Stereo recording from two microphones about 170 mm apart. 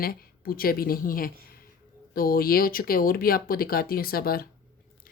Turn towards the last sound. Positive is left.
turn(degrees=60)  # may be behind; listen again after turning